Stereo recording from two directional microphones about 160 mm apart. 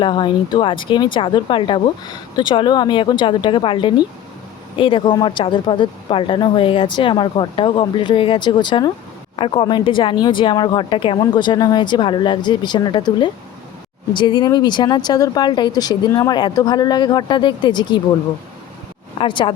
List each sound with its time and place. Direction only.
0.0 s speech: 30° left (ahead or behind)
19.2 s speech: 30° left (ahead or behind)